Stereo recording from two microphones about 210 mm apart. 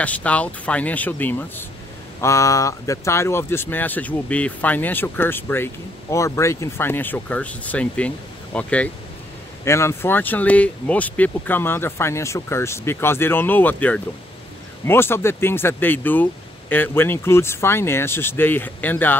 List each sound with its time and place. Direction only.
0.0 s speech: 5° left (ahead or behind)